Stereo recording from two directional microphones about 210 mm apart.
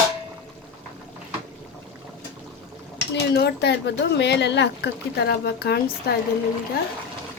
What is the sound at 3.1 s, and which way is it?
A woman's voice, 50° left (ahead or behind).